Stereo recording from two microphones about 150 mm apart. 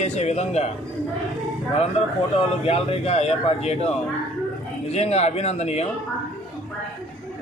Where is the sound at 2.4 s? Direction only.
40° left (ahead or behind).